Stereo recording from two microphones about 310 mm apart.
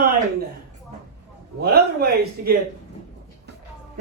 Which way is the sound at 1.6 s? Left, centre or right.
Right.